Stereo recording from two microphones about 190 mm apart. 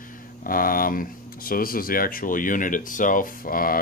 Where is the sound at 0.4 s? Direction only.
50° left (ahead or behind).